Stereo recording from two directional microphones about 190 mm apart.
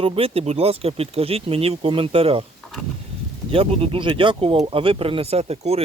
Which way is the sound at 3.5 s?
30° right (ahead or behind).